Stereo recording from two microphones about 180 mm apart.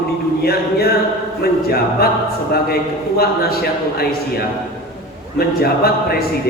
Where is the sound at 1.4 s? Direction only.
60° left (ahead or behind).